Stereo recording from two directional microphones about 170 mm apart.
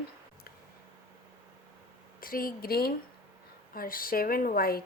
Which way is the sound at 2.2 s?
60° left (ahead or behind).